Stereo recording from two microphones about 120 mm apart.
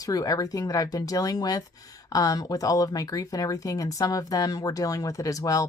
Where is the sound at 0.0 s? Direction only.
30° left (ahead or behind).